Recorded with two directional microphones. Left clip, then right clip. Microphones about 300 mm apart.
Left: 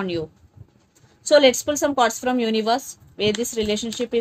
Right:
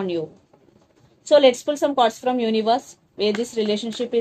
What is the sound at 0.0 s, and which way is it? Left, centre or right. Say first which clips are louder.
A woman's voice: right 1 dB; left.